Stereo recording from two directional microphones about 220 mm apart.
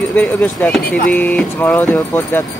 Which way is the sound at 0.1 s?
10° left (ahead or behind).